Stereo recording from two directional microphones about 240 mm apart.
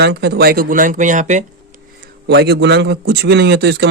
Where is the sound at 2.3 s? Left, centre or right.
Right.